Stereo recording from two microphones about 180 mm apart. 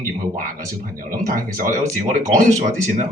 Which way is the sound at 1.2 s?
50° right (ahead or behind).